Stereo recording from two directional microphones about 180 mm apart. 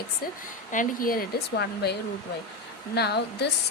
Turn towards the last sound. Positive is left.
turn(degrees=65)  # may be behind; listen again after turning